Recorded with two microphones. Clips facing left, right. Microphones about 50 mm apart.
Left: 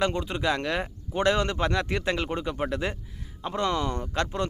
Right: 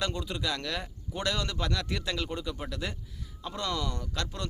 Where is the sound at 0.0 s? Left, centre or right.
Left.